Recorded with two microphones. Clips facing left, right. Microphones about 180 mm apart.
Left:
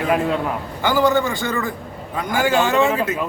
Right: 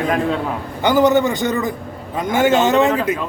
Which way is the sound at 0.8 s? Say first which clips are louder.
Right 4 dB; 20° right (ahead or behind).